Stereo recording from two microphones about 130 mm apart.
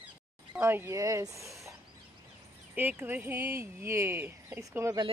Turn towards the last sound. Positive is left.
turn(degrees=-20)  # may be behind; listen again after turning